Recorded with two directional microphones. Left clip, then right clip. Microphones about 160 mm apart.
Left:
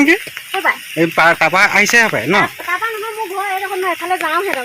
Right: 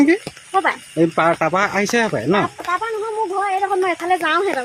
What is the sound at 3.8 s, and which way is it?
Speech, 30° right (ahead or behind).